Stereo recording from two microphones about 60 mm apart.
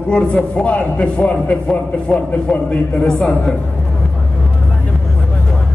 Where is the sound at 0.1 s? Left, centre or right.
Left.